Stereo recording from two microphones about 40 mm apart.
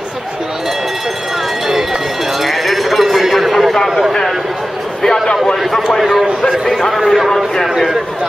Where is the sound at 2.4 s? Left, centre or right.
Centre.